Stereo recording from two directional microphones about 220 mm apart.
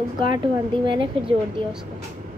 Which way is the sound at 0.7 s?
20° right (ahead or behind).